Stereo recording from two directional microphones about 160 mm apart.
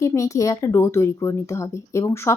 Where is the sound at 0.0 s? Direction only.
20° left (ahead or behind).